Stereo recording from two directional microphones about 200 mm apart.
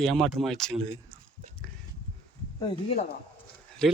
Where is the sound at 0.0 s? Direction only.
Centre (ahead or behind).